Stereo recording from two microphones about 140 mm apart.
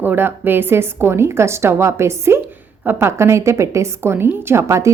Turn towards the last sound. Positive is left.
turn(degrees=-20)  # may be behind; listen again after turning